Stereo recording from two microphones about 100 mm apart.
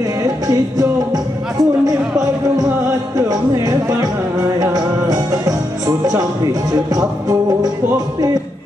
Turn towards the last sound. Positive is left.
turn(degrees=-40)  # may be behind; listen again after turning